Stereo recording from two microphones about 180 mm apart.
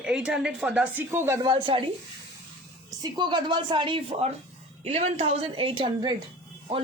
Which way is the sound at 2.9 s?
20° right (ahead or behind).